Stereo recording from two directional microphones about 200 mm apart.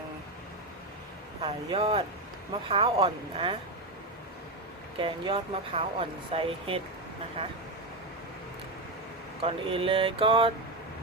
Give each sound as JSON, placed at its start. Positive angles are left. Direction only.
{"t": 1.5, "sound": "speech", "side_deg": -25}
{"t": 4.9, "sound": "speech", "side_deg": -25}
{"t": 9.4, "sound": "speech", "side_deg": -25}